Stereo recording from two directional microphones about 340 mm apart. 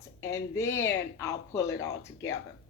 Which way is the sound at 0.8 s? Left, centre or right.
Centre.